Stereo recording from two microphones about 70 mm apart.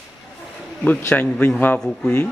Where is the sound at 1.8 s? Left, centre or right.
Centre.